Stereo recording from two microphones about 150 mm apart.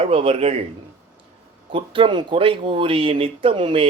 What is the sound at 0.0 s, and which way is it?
Speech, 40° right (ahead or behind).